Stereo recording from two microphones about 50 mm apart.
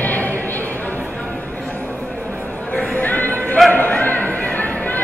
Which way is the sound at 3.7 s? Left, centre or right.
Left.